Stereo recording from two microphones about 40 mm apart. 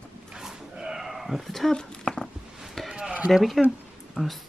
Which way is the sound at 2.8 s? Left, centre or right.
Centre.